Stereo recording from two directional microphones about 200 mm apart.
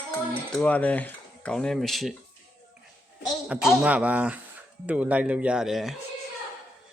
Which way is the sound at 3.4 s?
5° right (ahead or behind).